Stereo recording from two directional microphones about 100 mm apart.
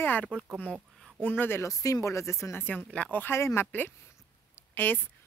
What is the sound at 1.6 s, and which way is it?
Speech, 35° left (ahead or behind).